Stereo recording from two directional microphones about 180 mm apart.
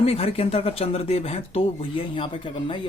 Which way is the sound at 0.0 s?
35° left (ahead or behind).